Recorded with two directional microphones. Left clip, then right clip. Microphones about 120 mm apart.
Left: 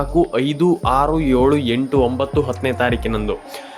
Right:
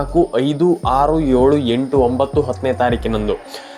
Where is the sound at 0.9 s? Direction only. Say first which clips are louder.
Right 2 dB; 5° left (ahead or behind).